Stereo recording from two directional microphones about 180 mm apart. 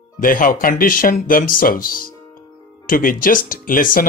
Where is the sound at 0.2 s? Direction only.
50° left (ahead or behind).